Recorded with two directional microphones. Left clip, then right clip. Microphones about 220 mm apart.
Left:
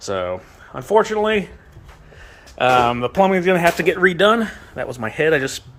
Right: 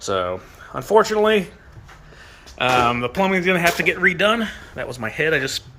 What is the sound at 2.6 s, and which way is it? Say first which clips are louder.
Speech: left 2 dB; 15° left (ahead or behind).